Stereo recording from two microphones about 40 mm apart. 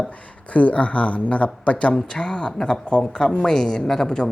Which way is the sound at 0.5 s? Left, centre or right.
Left.